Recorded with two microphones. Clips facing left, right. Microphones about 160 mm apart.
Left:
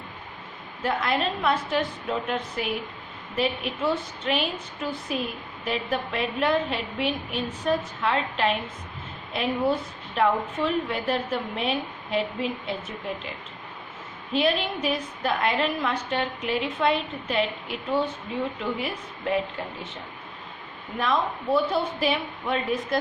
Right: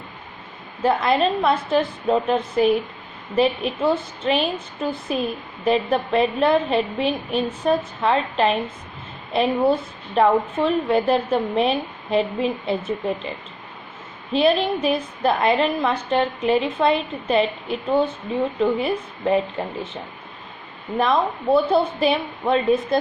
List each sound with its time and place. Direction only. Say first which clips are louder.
0.8 s a woman's voice: right 7 dB; 25° right (ahead or behind)
14.3 s a woman's voice: right 6 dB; 30° right (ahead or behind)
21.0 s a woman's voice: right 5 dB; 30° right (ahead or behind)